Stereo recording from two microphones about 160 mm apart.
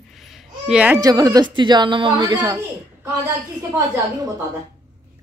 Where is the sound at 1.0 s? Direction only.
25° right (ahead or behind).